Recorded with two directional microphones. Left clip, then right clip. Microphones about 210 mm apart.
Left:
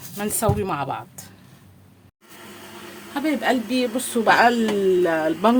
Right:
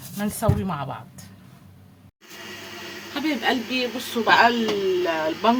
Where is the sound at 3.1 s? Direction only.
50° left (ahead or behind).